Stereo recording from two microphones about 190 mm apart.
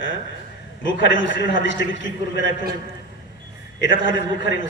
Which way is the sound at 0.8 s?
75° left (ahead or behind).